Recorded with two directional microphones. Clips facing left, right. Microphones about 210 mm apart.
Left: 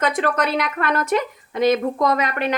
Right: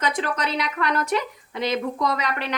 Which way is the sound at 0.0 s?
55° left (ahead or behind).